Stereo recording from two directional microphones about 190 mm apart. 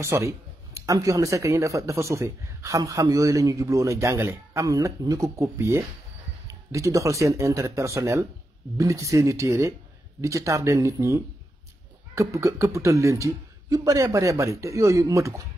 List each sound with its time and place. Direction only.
0.0 s speech: 15° right (ahead or behind)